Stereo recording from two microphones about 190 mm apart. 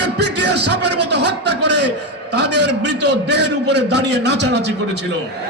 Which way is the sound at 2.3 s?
65° right (ahead or behind).